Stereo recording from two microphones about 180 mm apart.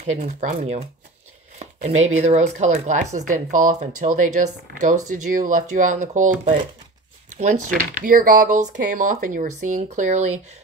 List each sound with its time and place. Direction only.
0.0 s speech: 40° right (ahead or behind)